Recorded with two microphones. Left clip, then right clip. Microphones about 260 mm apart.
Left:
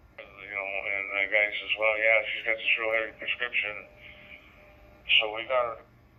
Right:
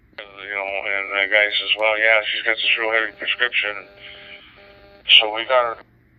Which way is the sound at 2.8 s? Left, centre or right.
Centre.